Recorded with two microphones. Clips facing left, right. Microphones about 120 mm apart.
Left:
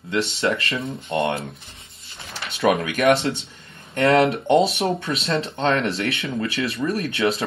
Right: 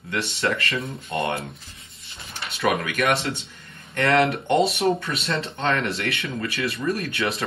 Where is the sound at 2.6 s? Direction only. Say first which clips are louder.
Left 5 dB; 30° left (ahead or behind).